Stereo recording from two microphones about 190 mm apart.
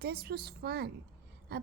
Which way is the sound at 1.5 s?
55° right (ahead or behind).